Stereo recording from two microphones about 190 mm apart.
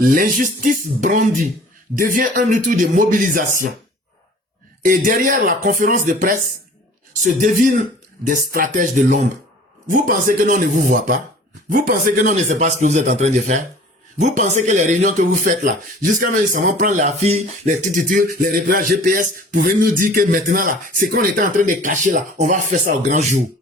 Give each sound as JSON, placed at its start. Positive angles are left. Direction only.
{"t": 0.0, "sound": "speech", "side_deg": -50}
{"t": 4.8, "sound": "speech", "side_deg": -45}
{"t": 7.3, "sound": "a man's voice", "side_deg": -45}